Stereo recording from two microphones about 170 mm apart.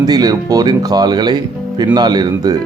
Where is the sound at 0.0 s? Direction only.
25° right (ahead or behind).